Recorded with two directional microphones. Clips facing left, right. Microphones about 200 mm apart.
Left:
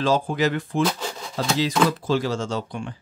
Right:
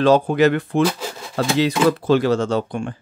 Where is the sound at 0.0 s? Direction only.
65° right (ahead or behind).